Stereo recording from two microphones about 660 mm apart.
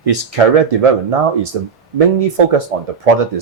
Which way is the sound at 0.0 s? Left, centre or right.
Right.